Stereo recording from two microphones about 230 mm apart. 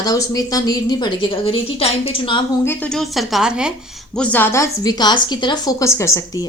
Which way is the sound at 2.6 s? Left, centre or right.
Centre.